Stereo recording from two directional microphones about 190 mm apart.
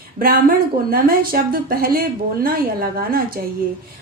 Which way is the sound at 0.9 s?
50° right (ahead or behind).